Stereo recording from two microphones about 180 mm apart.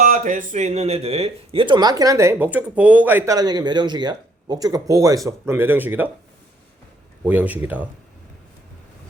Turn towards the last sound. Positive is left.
turn(degrees=-10)  # may be behind; listen again after turning